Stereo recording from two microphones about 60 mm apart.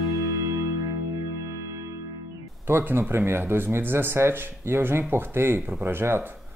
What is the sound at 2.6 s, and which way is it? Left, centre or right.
Speech, right.